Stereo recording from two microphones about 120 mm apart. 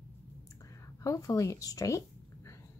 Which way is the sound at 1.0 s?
25° left (ahead or behind).